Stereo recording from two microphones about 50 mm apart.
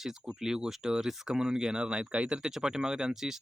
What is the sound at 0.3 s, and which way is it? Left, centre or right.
Speech, centre.